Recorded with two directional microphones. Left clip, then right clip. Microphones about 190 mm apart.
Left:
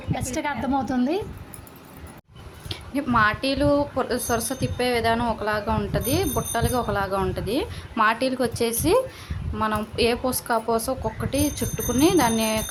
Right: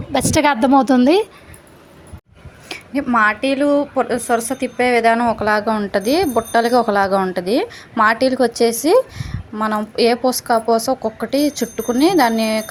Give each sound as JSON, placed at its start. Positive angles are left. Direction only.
{"t": 0.1, "sound": "a woman's voice", "side_deg": -50}
{"t": 2.6, "sound": "a sound", "side_deg": -25}
{"t": 3.0, "sound": "a woman's voice", "side_deg": -20}